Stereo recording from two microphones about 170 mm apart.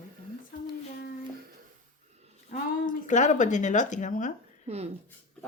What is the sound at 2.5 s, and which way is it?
Speech, 50° left (ahead or behind).